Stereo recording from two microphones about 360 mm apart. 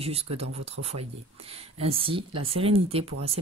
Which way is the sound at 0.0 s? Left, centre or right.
Centre.